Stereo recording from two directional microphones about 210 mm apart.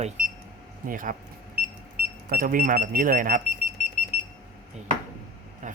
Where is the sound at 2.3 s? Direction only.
45° right (ahead or behind).